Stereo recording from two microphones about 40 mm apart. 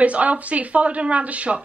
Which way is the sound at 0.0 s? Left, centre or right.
Right.